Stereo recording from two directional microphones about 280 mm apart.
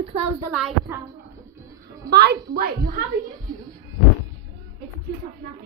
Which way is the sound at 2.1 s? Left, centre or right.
Right.